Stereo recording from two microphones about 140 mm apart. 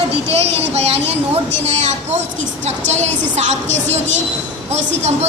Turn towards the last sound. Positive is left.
turn(degrees=-55)  # may be behind; listen again after turning